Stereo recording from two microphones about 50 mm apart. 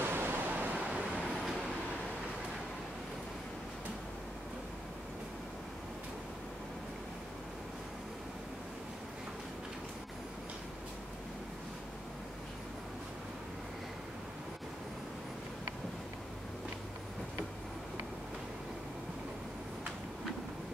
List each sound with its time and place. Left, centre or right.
0.0 s waves: right
0.8 s vehicle: right
1.2 s train: centre